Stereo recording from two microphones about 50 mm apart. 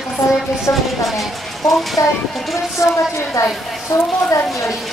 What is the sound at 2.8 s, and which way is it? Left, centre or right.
Speech, left.